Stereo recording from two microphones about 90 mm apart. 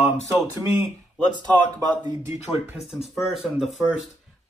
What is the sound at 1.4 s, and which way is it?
Speech, 50° right (ahead or behind).